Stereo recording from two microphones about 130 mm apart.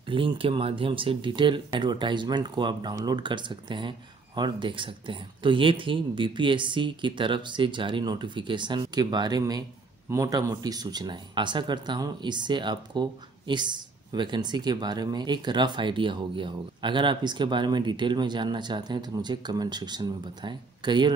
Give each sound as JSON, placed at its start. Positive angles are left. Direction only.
{"t": 0.1, "sound": "speech", "side_deg": -45}